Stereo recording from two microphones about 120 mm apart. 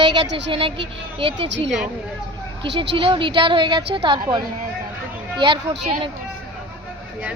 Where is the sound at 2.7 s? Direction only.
45° right (ahead or behind).